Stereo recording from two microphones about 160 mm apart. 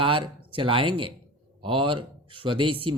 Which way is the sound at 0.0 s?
30° right (ahead or behind).